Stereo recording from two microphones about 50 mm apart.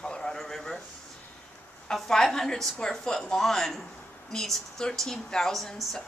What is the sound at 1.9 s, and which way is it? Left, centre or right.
Speech, centre.